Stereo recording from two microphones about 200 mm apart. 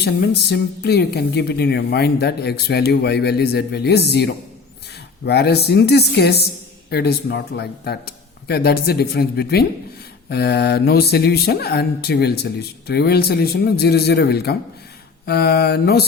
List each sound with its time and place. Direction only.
0.0 s a woman's voice: 55° left (ahead or behind)